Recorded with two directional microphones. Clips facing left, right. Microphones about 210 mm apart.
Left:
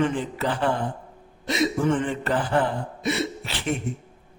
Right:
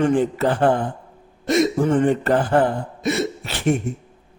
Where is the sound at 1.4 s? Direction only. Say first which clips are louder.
Right 5 dB; 50° right (ahead or behind).